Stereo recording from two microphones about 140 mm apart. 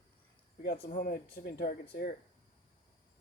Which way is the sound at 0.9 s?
90° left.